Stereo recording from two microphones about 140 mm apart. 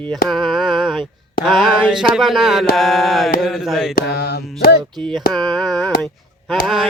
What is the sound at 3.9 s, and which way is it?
Mantra, 90° left.